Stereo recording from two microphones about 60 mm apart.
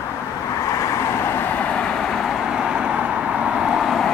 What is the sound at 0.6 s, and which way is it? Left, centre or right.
Vehicle, left.